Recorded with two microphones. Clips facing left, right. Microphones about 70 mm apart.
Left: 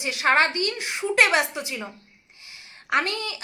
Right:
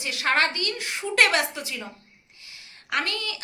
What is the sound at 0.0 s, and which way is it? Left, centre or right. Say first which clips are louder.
A woman's voice: left 3 dB; left.